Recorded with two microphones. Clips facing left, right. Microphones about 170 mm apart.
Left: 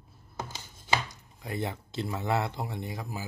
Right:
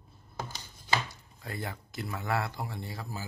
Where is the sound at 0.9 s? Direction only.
20° left (ahead or behind).